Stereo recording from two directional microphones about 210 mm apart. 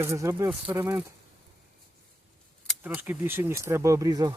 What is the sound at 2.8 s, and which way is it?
Speech, 10° right (ahead or behind).